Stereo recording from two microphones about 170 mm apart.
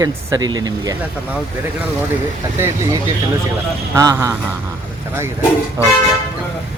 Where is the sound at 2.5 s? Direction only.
15° right (ahead or behind).